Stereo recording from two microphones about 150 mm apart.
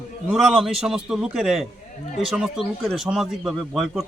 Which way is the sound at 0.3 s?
Centre (ahead or behind).